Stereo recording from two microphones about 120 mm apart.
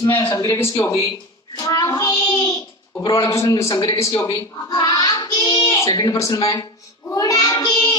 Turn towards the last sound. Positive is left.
turn(degrees=35)  # may be behind; listen again after turning